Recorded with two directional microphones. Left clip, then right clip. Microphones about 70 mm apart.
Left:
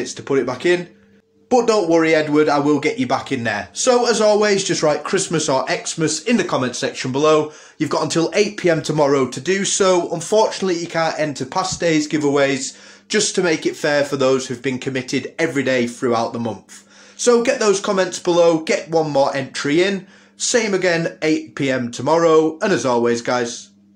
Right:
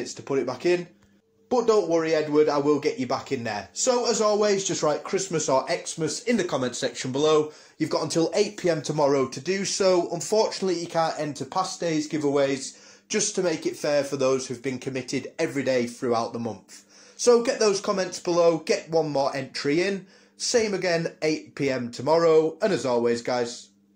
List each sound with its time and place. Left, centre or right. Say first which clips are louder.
0.0 s speech: left 7 dB; centre
1.5 s speech: left 6 dB; centre
4.7 s speech: left 7 dB; centre
5.4 s speech: left 2 dB; centre
5.9 s speech: left 7 dB; centre
6.3 s speech: left 6 dB; centre
6.6 s speech: left 6 dB; right
8.1 s speech: left 6 dB; centre
8.9 s speech: left 6 dB; centre
11.3 s speech: left 6 dB; centre
17.2 s speech: left 5 dB; right
18.2 s speech: left 6 dB; centre